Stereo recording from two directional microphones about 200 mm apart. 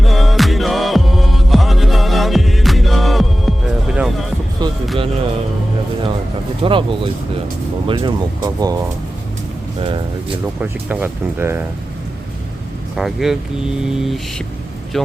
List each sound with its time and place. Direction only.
0.0 s music: centre (ahead or behind)
4.6 s music: 20° right (ahead or behind)
6.6 s speech: 25° right (ahead or behind)
9.8 s a sound: 25° right (ahead or behind)
10.6 s speech: 10° right (ahead or behind)
13.0 s mantra: centre (ahead or behind)